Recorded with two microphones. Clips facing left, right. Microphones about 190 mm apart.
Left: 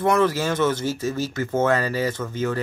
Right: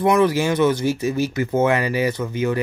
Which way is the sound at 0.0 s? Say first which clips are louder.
Right 3 dB; 15° right (ahead or behind).